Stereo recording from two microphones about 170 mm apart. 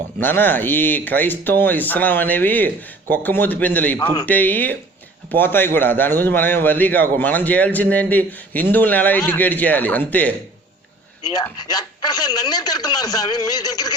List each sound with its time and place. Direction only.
0.2 s a man's voice: 10° left (ahead or behind)
11.5 s a man's voice: 25° left (ahead or behind)